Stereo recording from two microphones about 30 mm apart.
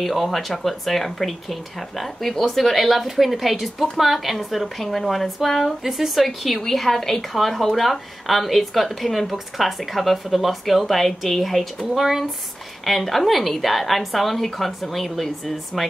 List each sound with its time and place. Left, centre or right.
0.0 s a woman's voice: centre
5.9 s a woman's voice: centre
11.9 s speech: centre
12.8 s a woman's voice: centre